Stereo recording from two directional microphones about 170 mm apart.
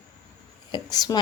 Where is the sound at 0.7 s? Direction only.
25° left (ahead or behind).